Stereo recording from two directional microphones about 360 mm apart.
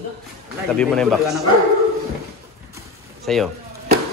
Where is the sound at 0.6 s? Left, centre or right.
Centre.